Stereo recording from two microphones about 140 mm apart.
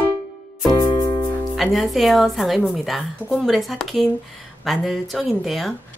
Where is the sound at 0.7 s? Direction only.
30° left (ahead or behind).